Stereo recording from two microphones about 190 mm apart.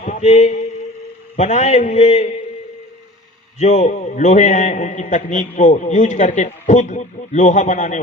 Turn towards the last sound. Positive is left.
turn(degrees=40)  # may be behind; listen again after turning